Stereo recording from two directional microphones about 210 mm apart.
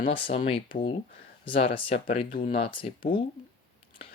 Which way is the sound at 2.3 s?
40° left (ahead or behind).